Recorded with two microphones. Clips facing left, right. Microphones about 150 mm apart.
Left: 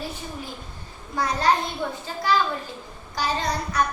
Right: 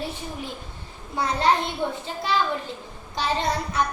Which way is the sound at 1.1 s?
25° right (ahead or behind).